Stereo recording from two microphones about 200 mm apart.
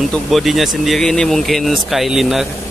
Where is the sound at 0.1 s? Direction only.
Centre (ahead or behind).